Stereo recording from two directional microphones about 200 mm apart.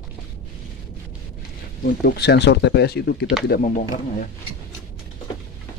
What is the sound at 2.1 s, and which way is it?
Speech, 55° left (ahead or behind).